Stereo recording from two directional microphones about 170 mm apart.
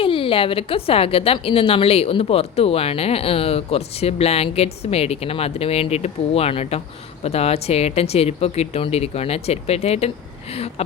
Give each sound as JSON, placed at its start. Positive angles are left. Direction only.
{"t": 0.0, "sound": "a woman's voice", "side_deg": 30}